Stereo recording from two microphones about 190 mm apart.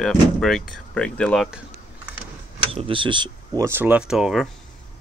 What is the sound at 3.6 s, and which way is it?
Speech, 10° right (ahead or behind).